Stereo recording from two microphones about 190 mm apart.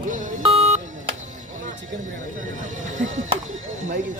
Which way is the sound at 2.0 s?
40° right (ahead or behind).